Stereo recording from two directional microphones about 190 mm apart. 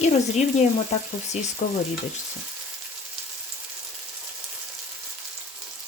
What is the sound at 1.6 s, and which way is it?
Speech, 40° left (ahead or behind).